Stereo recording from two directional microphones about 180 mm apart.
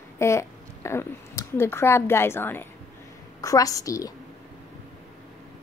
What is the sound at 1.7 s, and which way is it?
A woman's voice, 15° left (ahead or behind).